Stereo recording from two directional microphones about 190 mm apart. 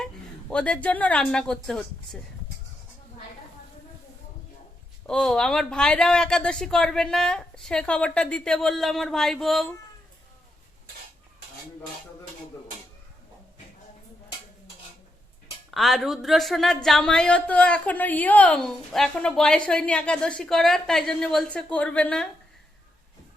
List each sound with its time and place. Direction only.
0.5 s speech: 5° left (ahead or behind)
5.0 s speech: 5° left (ahead or behind)
15.7 s speech: centre (ahead or behind)